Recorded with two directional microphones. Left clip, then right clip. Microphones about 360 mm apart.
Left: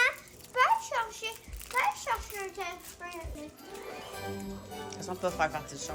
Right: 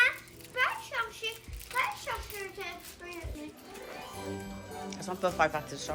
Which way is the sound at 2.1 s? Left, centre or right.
Left.